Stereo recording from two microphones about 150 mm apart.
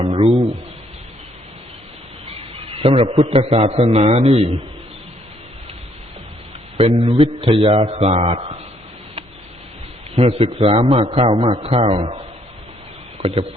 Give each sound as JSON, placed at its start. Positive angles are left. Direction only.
{"t": 0.0, "sound": "a man's voice", "side_deg": -40}
{"t": 2.2, "sound": "a man's voice", "side_deg": -40}
{"t": 6.7, "sound": "a man's voice", "side_deg": -40}
{"t": 10.2, "sound": "a man's voice", "side_deg": -45}